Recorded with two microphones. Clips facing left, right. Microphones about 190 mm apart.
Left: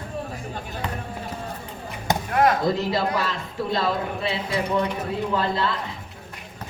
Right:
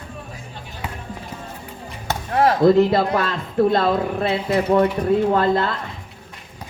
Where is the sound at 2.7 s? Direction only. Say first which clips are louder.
Right 7 dB; 55° right (ahead or behind).